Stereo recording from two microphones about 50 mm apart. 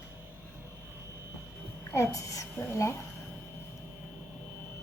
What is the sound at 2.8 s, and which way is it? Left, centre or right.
Speech, left.